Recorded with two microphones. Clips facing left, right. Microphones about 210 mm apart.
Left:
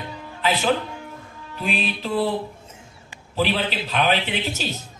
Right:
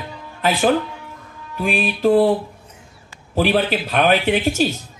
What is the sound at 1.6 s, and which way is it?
Speech, 50° right (ahead or behind).